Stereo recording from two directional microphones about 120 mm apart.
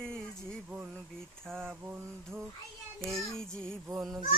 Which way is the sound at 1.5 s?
15° right (ahead or behind).